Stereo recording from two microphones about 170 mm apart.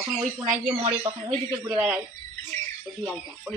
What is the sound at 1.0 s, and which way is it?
Speech, 30° right (ahead or behind).